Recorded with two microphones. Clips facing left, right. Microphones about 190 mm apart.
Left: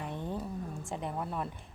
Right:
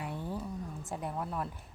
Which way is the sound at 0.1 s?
20° left (ahead or behind).